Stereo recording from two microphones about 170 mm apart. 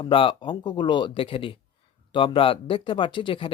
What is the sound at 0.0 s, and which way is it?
Speech, 30° left (ahead or behind).